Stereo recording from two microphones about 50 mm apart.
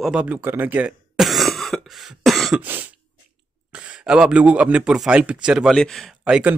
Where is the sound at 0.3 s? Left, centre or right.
Right.